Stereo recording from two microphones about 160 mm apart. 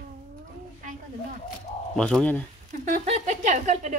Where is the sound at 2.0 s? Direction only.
5° left (ahead or behind).